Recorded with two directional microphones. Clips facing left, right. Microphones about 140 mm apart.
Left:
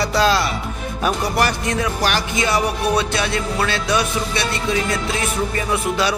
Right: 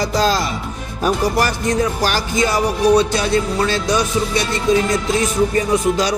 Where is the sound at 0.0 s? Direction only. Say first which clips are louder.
Even; 40° right (ahead or behind).